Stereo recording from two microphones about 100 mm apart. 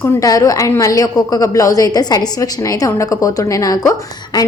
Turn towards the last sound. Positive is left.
turn(degrees=40)  # may be behind; listen again after turning